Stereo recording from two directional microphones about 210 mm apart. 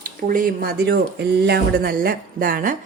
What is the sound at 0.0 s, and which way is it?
Speech, 45° right (ahead or behind).